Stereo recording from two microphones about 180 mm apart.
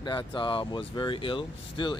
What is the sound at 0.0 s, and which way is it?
Speech, 25° left (ahead or behind).